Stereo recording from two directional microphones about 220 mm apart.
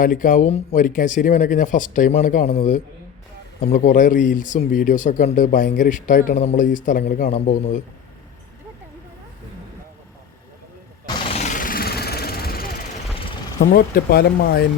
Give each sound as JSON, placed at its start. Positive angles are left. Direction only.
{"t": 0.0, "sound": "speech", "side_deg": 35}
{"t": 11.3, "sound": "vehicle", "side_deg": 30}
{"t": 13.6, "sound": "speech", "side_deg": 45}